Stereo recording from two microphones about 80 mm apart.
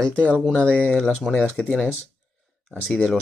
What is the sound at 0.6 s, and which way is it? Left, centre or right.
Speech, centre.